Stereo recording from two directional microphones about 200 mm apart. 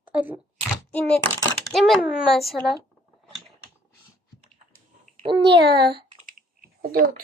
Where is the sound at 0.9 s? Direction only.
5° left (ahead or behind).